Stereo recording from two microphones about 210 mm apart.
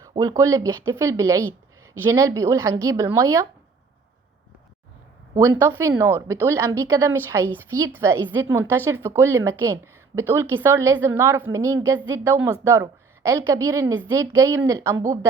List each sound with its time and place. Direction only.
0.2 s a woman's voice: 15° right (ahead or behind)
5.3 s a woman's voice: 10° right (ahead or behind)